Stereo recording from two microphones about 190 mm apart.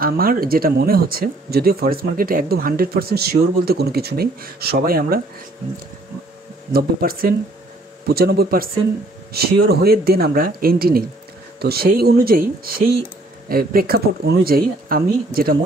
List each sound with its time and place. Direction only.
0.0 s speech: 50° right (ahead or behind)
6.7 s speech: 50° right (ahead or behind)